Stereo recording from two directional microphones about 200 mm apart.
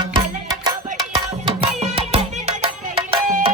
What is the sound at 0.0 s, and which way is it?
Music, 20° right (ahead or behind).